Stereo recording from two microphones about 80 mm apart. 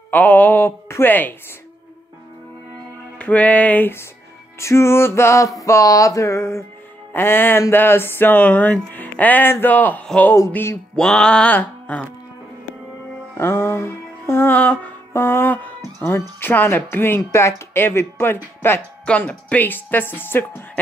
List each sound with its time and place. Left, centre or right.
0.1 s speech: left
3.2 s speech: centre
4.6 s music: left
7.1 s music: left
7.7 s speech: left
11.0 s music: centre
11.5 s a sound: left
13.4 s music: left
15.1 s speech: left